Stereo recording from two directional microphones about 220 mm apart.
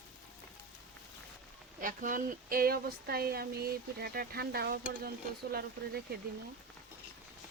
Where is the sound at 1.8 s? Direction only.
40° right (ahead or behind).